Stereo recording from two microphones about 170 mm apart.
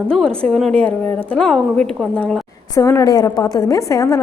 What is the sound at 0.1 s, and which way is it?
A woman's voice, 5° left (ahead or behind).